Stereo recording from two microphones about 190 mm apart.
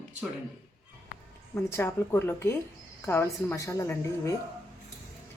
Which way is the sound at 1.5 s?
15° left (ahead or behind).